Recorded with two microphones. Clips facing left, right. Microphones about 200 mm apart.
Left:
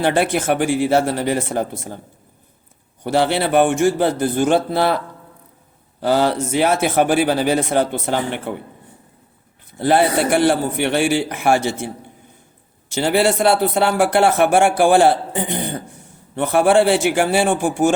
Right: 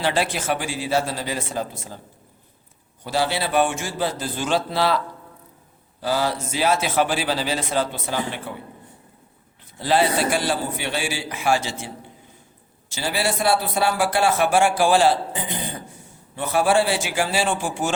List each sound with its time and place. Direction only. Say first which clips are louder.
0.0 s a man's voice: left 6 dB; 60° left (ahead or behind)
3.0 s a man's voice: left 6 dB; 60° left (ahead or behind)
9.7 s a man's voice: left 4 dB; 55° left (ahead or behind)
12.9 s a man's voice: left 8 dB; 60° left (ahead or behind)